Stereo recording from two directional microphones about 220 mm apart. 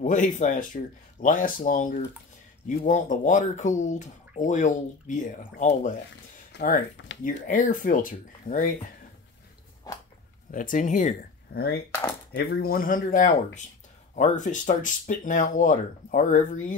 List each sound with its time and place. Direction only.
0.0 s speech: 35° left (ahead or behind)
6.5 s a sound: 50° left (ahead or behind)
7.0 s speech: 60° left (ahead or behind)
7.4 s speech: 35° left (ahead or behind)
10.5 s speech: 35° left (ahead or behind)